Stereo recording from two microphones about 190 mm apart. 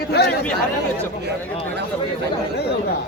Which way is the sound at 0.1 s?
60° left (ahead or behind).